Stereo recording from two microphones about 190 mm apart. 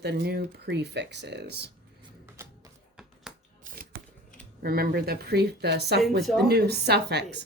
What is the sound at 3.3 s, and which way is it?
Shuffling cards, 5° right (ahead or behind).